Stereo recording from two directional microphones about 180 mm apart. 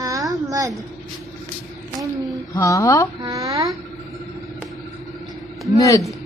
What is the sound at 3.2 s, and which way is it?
Speech, 20° right (ahead or behind).